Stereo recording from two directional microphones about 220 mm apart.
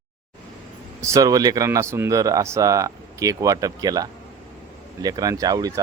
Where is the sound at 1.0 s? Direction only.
15° right (ahead or behind).